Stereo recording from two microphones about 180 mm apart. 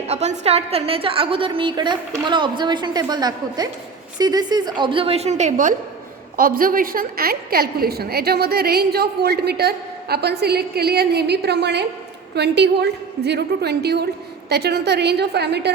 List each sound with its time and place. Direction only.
0.1 s a woman's voice: 35° right (ahead or behind); by 15.7 s 65° right (ahead or behind)